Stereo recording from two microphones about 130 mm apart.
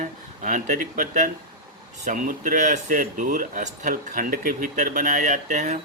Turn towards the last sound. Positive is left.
turn(degrees=-65)  # may be behind; listen again after turning